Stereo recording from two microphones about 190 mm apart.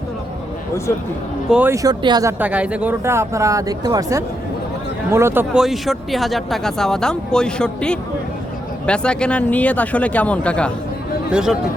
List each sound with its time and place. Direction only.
1.5 s speech: 10° right (ahead or behind)
2.4 s speech: 10° right (ahead or behind)
11.3 s speech: 5° right (ahead or behind)